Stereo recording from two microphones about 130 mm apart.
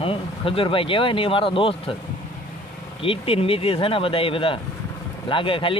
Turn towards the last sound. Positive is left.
turn(degrees=40)  # may be behind; listen again after turning